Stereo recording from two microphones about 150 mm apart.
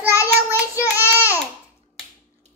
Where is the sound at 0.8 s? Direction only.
10° right (ahead or behind).